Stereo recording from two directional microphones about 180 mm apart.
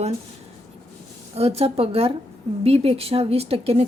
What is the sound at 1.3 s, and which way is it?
Speech, 35° right (ahead or behind).